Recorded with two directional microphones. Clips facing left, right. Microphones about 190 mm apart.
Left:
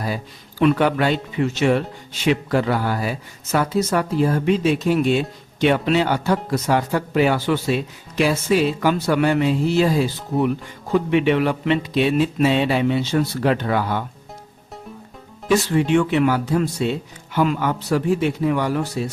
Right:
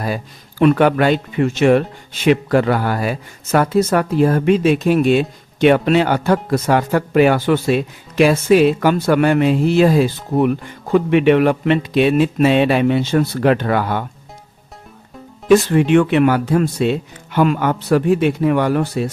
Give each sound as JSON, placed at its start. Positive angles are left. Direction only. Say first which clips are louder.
{"t": 0.6, "sound": "speech", "louder": "right 4 dB", "side_deg": -55}
{"t": 15.7, "sound": "speech", "louder": "right 4 dB", "side_deg": -65}